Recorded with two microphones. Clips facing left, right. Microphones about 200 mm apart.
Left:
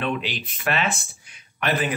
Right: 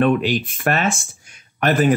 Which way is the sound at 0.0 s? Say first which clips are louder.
Right 10 dB; 45° right (ahead or behind).